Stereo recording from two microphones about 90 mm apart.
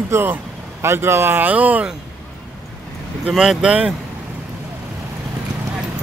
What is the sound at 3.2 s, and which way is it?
Speech, 10° right (ahead or behind).